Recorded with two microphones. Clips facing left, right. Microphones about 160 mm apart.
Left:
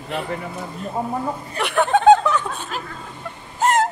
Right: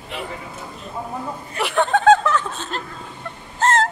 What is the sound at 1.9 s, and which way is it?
Snicker, 15° left (ahead or behind).